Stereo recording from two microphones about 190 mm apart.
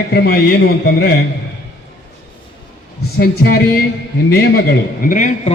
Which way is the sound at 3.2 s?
55° left (ahead or behind).